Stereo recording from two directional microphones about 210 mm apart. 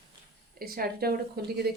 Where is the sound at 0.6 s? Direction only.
45° right (ahead or behind).